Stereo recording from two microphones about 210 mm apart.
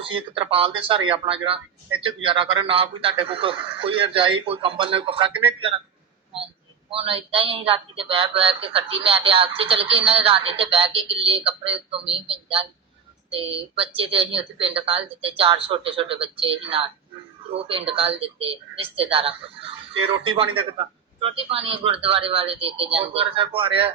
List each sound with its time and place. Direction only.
0.0 s speech: 25° right (ahead or behind)
6.9 s speech: 25° right (ahead or behind)